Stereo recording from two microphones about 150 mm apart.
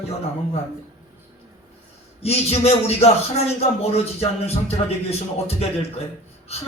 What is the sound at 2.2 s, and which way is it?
Speech, 45° left (ahead or behind).